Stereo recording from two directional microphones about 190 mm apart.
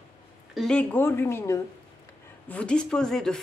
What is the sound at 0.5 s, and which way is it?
Speech, 5° left (ahead or behind).